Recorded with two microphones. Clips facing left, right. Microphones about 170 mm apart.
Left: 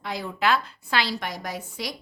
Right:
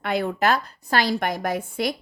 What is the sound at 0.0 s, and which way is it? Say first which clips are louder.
A woman's voice: right 5 dB; 60° right (ahead or behind).